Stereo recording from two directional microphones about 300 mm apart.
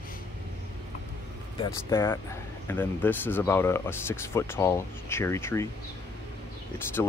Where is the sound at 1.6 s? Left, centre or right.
Centre.